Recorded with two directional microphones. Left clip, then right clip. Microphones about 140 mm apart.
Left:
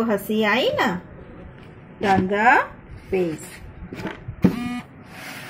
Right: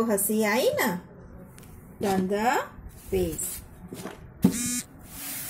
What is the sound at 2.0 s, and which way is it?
Speech, 25° right (ahead or behind).